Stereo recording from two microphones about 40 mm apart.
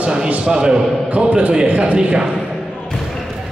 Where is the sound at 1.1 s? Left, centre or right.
Right.